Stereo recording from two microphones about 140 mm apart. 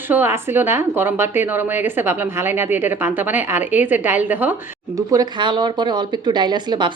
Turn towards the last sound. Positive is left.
turn(degrees=-35)  # may be behind; listen again after turning